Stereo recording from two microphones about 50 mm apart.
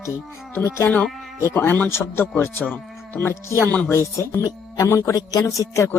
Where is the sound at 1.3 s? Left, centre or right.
Left.